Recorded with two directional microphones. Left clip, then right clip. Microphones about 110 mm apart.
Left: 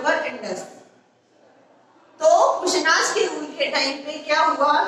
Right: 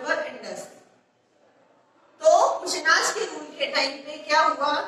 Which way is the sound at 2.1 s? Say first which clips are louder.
Left 2 dB; 30° left (ahead or behind).